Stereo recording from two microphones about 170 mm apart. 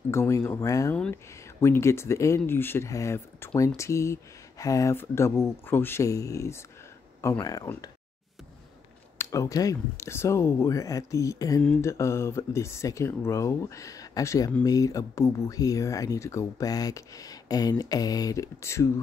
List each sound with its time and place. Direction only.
0.1 s speech: 15° left (ahead or behind)
9.2 s speech: 20° left (ahead or behind)